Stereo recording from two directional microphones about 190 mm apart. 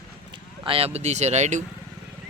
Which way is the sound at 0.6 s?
30° right (ahead or behind).